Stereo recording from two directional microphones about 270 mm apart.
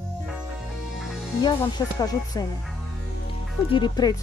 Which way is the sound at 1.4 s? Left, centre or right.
Centre.